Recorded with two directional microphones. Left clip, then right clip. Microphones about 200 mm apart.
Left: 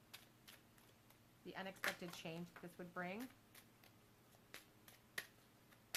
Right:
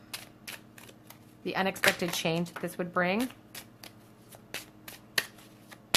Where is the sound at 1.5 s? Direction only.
35° right (ahead or behind).